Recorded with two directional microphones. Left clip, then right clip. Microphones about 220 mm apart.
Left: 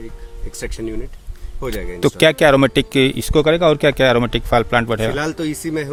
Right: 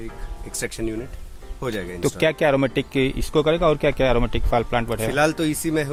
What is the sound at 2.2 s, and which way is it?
Speech, 50° left (ahead or behind).